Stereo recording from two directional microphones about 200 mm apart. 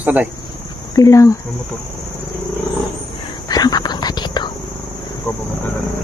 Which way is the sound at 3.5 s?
20° left (ahead or behind).